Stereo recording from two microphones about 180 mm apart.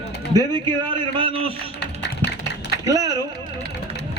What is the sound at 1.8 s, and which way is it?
Tap, 65° left (ahead or behind).